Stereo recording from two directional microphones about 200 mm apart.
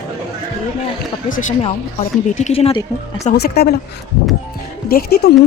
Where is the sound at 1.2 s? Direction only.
40° left (ahead or behind).